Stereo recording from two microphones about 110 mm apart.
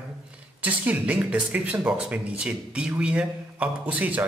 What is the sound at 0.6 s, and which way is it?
A woman's voice, 15° right (ahead or behind).